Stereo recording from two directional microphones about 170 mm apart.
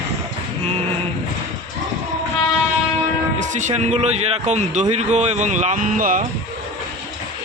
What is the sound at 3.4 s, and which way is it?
A man's voice, 45° right (ahead or behind).